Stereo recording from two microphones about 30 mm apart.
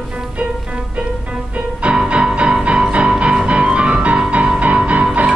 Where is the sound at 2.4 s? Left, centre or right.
Right.